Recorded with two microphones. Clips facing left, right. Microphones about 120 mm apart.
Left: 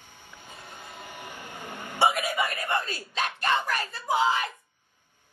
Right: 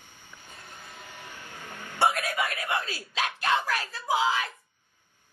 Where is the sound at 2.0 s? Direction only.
Centre (ahead or behind).